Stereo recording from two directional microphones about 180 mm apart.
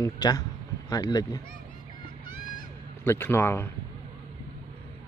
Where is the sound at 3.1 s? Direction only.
15° left (ahead or behind).